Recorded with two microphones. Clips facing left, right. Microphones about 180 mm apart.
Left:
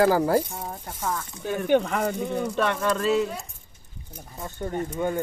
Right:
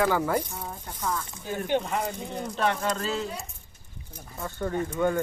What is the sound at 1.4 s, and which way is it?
Speech, 65° left (ahead or behind).